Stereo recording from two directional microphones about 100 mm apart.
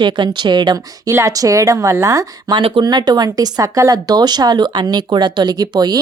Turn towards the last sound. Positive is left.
turn(degrees=-45)  # may be behind; listen again after turning